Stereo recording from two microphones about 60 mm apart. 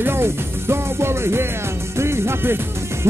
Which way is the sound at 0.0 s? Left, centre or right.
Right.